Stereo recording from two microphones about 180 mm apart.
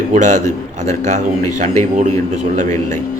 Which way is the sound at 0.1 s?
45° right (ahead or behind).